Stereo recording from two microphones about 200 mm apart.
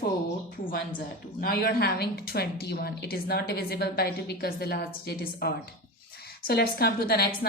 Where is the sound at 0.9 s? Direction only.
45° left (ahead or behind).